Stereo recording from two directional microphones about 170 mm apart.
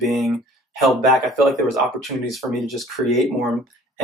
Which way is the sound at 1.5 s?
Centre (ahead or behind).